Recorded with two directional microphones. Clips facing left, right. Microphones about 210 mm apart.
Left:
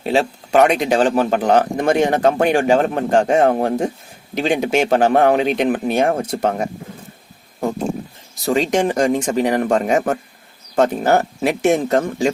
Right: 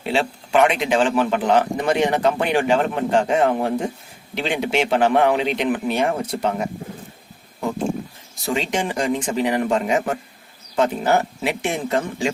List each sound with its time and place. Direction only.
0.0 s a man's voice: 40° left (ahead or behind)
8.4 s a man's voice: 40° left (ahead or behind)